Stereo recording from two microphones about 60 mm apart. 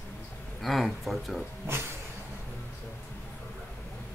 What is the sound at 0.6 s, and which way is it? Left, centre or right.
Speech, centre.